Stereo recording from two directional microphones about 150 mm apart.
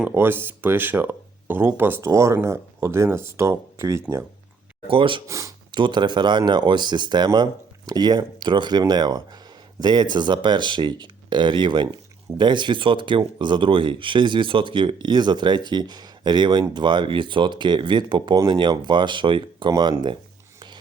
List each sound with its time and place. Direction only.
0.0 s speech: 15° right (ahead or behind)
4.9 s speech: 35° right (ahead or behind)
5.3 s speech: 20° right (ahead or behind)
5.7 s speech: 30° right (ahead or behind)